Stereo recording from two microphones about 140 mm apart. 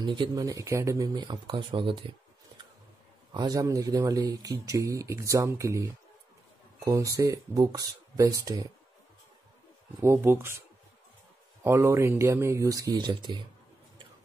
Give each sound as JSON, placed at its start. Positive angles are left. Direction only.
{"t": 0.0, "sound": "speech", "side_deg": -30}
{"t": 3.3, "sound": "speech", "side_deg": -25}
{"t": 9.9, "sound": "speech", "side_deg": -20}
{"t": 11.6, "sound": "speech", "side_deg": -20}